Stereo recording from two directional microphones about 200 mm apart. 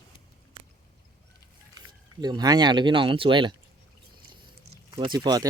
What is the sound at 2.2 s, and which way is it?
Speech, 20° right (ahead or behind).